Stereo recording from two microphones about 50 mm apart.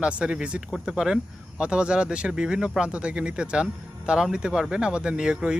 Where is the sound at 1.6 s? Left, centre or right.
Right.